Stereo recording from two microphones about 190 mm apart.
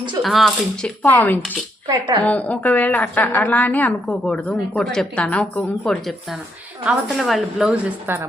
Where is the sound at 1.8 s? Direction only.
25° right (ahead or behind).